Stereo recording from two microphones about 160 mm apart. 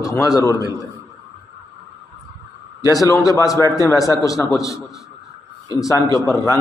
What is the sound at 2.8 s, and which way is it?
A man's voice, 20° left (ahead or behind).